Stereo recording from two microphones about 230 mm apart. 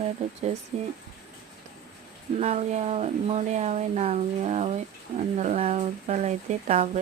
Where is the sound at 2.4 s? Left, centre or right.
Right.